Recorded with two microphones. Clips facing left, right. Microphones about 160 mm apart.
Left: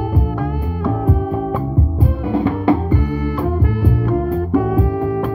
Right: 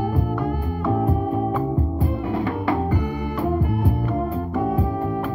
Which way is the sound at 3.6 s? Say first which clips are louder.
Left 4 dB; 90° left.